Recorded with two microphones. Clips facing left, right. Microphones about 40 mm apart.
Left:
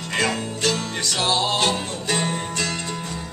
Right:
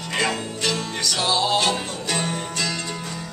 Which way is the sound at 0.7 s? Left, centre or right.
Left.